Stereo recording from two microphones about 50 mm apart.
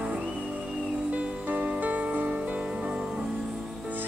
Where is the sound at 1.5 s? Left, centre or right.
Right.